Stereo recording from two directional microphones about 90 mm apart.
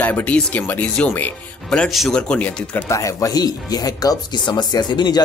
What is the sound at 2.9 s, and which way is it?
Speech, 35° left (ahead or behind).